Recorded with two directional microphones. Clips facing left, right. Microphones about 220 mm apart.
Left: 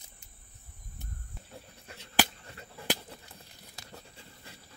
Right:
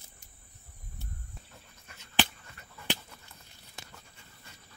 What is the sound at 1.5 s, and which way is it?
Goat, 30° left (ahead or behind).